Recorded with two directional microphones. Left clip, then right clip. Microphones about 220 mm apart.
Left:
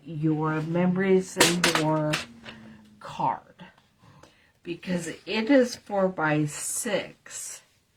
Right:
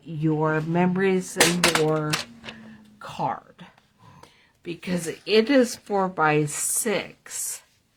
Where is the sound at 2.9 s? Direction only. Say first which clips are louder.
Even; 45° right (ahead or behind).